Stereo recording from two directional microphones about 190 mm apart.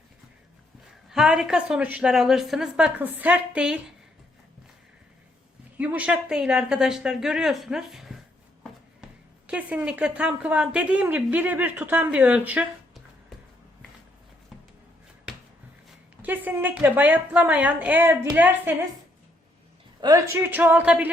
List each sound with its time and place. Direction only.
1.1 s a woman's voice: 5° right (ahead or behind)
5.8 s a woman's voice: 5° right (ahead or behind)
9.5 s a woman's voice: 5° right (ahead or behind)
16.2 s a woman's voice: 10° right (ahead or behind)
20.0 s a woman's voice: 20° right (ahead or behind)